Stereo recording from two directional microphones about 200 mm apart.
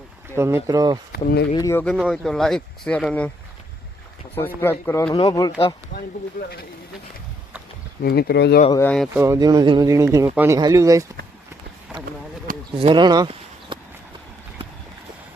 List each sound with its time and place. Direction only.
0.3 s speech: 15° right (ahead or behind)
1.1 s speech: 50° left (ahead or behind)
1.5 s speech: 15° left (ahead or behind)
4.4 s speech: 10° left (ahead or behind)
6.4 s speech: 40° left (ahead or behind)
8.0 s speech: 50° left (ahead or behind)
8.7 s speech: 10° left (ahead or behind)
9.1 s speech: 15° right (ahead or behind)
12.7 s speech: 25° right (ahead or behind)